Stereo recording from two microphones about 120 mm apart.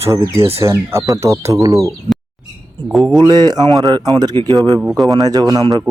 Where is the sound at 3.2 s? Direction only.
35° right (ahead or behind).